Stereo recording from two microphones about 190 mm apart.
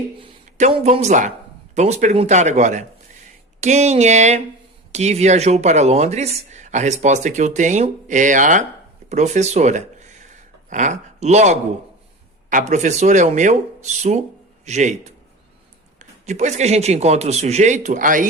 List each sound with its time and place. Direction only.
0.2 s speech: 35° right (ahead or behind)